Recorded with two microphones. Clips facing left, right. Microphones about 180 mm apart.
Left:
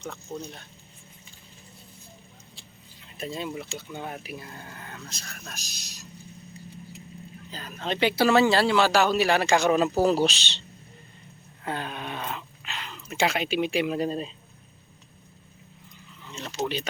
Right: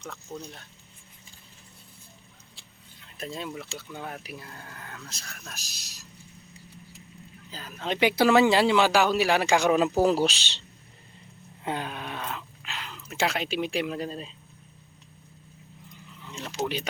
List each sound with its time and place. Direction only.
0.3 s speech: centre (ahead or behind)
3.2 s speech: 5° left (ahead or behind)
4.4 s speech: 20° left (ahead or behind)
5.0 s speech: centre (ahead or behind)
7.5 s speech: 5° right (ahead or behind)
11.6 s a sound: 15° right (ahead or behind)
11.9 s speech: centre (ahead or behind); by 14.3 s 20° left (ahead or behind)
16.2 s speech: 10° right (ahead or behind)